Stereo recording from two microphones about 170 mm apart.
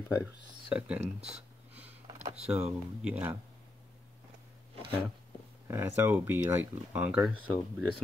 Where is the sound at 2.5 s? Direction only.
5° right (ahead or behind).